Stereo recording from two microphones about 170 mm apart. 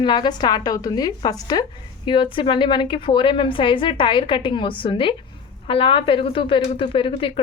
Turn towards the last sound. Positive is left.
turn(degrees=30)  # may be behind; listen again after turning